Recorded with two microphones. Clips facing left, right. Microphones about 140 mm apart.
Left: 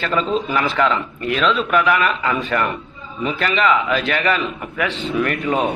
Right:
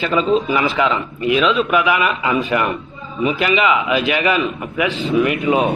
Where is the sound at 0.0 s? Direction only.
5° right (ahead or behind).